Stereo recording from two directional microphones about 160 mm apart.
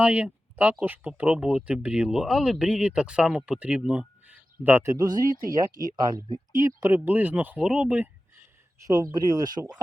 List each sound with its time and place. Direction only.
0.0 s speech: 10° right (ahead or behind)
8.8 s speech: 25° right (ahead or behind)